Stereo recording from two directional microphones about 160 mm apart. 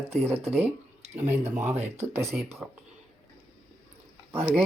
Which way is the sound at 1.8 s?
15° right (ahead or behind).